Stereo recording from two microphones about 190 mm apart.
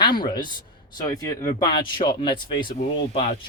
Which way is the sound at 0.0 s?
25° left (ahead or behind).